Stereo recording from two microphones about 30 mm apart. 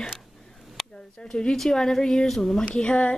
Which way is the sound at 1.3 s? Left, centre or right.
Left.